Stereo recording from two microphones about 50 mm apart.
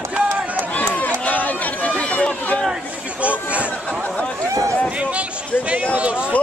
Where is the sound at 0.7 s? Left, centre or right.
Left.